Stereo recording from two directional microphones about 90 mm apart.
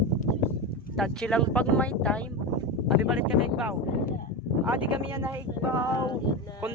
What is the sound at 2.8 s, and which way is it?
Speech, 5° right (ahead or behind).